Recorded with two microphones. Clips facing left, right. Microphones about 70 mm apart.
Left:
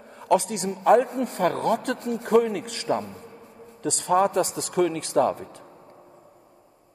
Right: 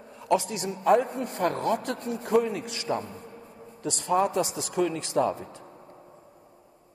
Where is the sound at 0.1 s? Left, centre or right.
Left.